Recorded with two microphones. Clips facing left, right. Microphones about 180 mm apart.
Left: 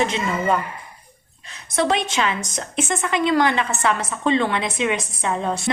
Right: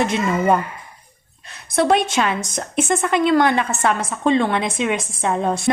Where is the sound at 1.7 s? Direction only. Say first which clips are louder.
Right 4 dB; 50° right (ahead or behind).